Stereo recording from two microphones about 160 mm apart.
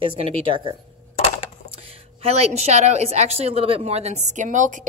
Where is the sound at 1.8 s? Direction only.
40° right (ahead or behind).